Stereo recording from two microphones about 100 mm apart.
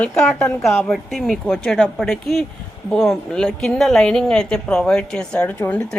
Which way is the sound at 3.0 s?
5° left (ahead or behind).